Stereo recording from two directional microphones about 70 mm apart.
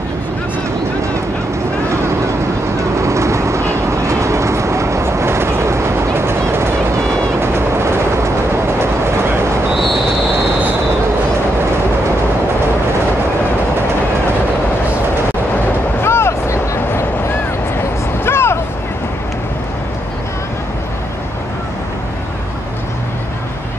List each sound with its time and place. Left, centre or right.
2.8 s vehicle: right
16.0 s a sound: left
18.2 s vehicle: left